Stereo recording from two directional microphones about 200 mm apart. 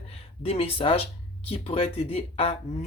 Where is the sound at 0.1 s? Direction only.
30° left (ahead or behind).